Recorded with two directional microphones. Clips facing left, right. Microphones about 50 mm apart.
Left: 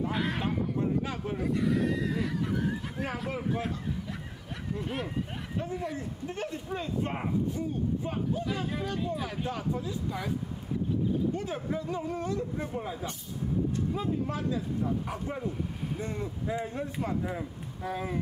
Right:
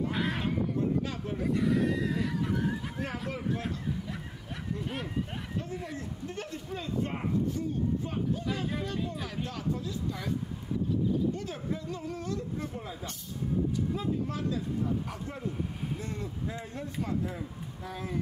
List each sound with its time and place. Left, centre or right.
0.0 s a sound: centre
0.7 s a sound: centre
1.4 s speech: centre
4.8 s speech: centre
8.5 s speech: centre
9.5 s speech: centre
11.3 s speech: centre